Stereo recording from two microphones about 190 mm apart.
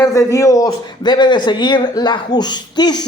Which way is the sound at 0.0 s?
15° left (ahead or behind).